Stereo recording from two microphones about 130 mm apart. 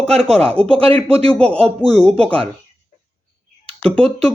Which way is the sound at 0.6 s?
45° right (ahead or behind).